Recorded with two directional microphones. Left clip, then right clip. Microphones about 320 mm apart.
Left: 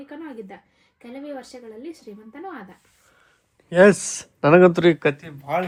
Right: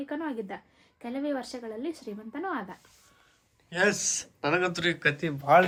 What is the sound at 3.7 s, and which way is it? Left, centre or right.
Speech, centre.